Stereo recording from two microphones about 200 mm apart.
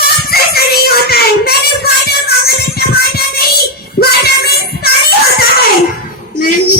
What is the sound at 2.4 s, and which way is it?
Music, 50° left (ahead or behind).